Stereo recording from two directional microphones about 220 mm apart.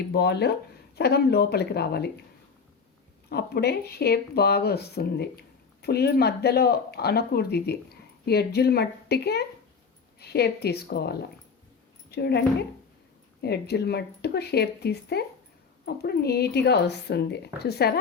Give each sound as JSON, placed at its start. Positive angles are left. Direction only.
{"t": 0.1, "sound": "speech", "side_deg": 50}
{"t": 3.2, "sound": "speech", "side_deg": 45}
{"t": 12.1, "sound": "speech", "side_deg": 50}
{"t": 13.4, "sound": "speech", "side_deg": 50}